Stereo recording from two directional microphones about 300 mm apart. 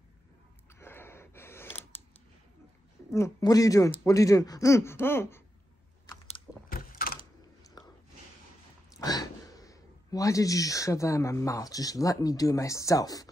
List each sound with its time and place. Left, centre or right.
0.7 s gasp: centre
3.1 s speech: centre
6.0 s biting: centre
6.7 s a sound: left
8.9 s speech: centre